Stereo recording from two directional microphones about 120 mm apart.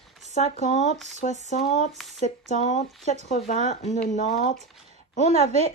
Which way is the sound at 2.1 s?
75° left (ahead or behind).